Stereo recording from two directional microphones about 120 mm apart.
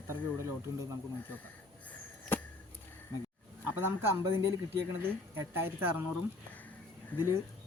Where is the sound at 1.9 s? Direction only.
15° left (ahead or behind).